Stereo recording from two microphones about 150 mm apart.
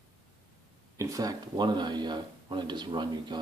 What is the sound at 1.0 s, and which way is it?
Speech, 25° right (ahead or behind).